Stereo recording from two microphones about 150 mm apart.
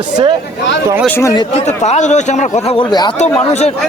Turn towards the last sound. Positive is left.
turn(degrees=50)  # may be behind; listen again after turning